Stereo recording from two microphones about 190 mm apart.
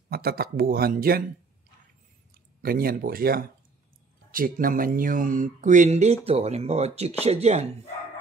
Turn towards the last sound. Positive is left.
turn(degrees=-35)  # may be behind; listen again after turning